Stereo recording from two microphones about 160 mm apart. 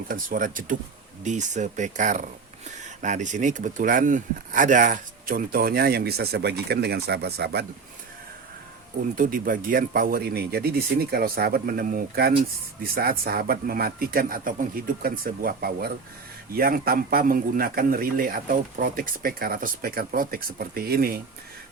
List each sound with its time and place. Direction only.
0.1 s a man's voice: 60° right (ahead or behind); by 7.6 s 90° right
9.1 s a man's voice: 60° right (ahead or behind)